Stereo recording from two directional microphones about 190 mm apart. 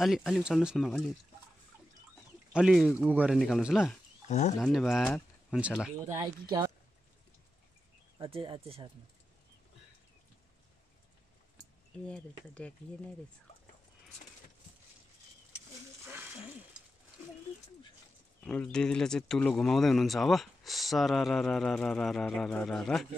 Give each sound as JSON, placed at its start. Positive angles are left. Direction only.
{"t": 0.0, "sound": "speech", "side_deg": 0}
{"t": 2.5, "sound": "speech", "side_deg": 0}
{"t": 4.3, "sound": "speech", "side_deg": 40}
{"t": 4.6, "sound": "speech", "side_deg": 0}
{"t": 6.0, "sound": "speech", "side_deg": -15}
{"t": 8.2, "sound": "speech", "side_deg": -30}
{"t": 12.1, "sound": "speech", "side_deg": 5}
{"t": 18.4, "sound": "speech", "side_deg": 5}